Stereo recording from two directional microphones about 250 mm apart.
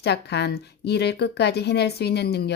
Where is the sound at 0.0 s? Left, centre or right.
Left.